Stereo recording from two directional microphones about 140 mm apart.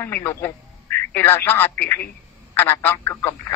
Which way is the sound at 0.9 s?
15° left (ahead or behind).